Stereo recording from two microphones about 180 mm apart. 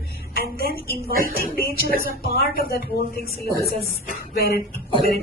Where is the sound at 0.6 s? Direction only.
55° left (ahead or behind).